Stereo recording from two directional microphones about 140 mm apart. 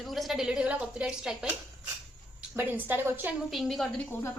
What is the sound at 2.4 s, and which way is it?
Speech, 15° right (ahead or behind).